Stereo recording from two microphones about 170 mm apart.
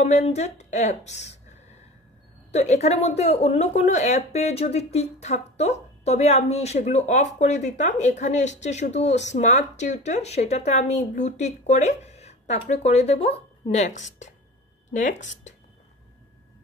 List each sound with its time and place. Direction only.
0.0 s speech: 40° left (ahead or behind)
2.5 s speech: 40° left (ahead or behind)